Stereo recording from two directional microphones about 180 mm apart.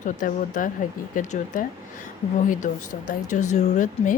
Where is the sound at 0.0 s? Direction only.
45° left (ahead or behind).